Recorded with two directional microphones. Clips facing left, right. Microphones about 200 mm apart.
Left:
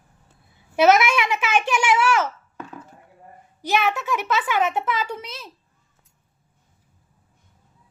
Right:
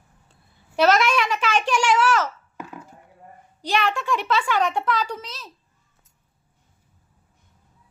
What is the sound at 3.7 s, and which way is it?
A child's voice, 5° left (ahead or behind).